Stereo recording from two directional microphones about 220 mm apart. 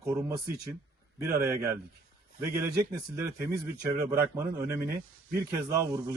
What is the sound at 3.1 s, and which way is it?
Speech, 15° right (ahead or behind).